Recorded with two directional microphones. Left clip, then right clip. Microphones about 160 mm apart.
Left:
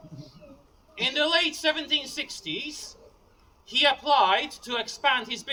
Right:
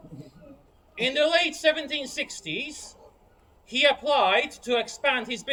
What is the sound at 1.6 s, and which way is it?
Speech, 10° left (ahead or behind).